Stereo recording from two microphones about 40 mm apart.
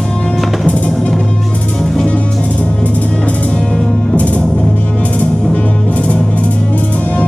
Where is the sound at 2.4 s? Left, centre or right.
Left.